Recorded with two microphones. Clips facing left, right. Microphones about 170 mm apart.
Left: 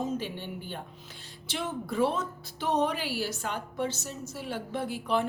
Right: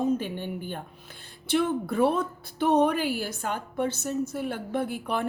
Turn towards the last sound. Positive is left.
turn(degrees=-55)  # may be behind; listen again after turning